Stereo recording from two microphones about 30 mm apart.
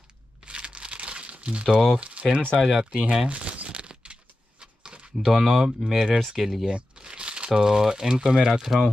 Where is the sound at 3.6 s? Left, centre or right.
Right.